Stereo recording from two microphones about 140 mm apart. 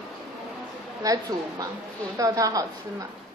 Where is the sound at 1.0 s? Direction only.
25° right (ahead or behind).